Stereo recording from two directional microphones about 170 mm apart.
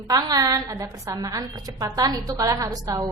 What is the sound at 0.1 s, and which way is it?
A woman's voice, 25° right (ahead or behind).